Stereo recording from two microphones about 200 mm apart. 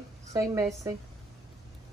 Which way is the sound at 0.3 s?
15° right (ahead or behind).